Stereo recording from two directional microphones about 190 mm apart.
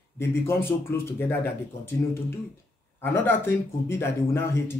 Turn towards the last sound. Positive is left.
turn(degrees=15)  # may be behind; listen again after turning